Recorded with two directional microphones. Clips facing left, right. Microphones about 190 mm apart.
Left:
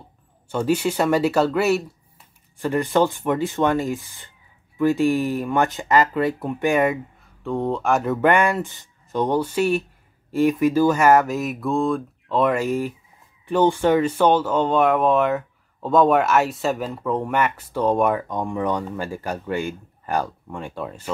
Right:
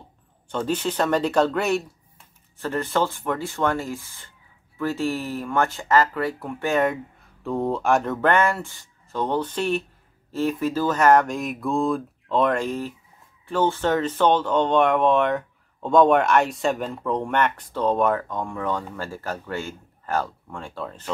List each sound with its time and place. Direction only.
0.5 s speech: 10° left (ahead or behind)
7.4 s speech: centre (ahead or behind)